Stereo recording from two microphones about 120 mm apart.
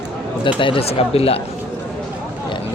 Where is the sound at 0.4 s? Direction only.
45° left (ahead or behind).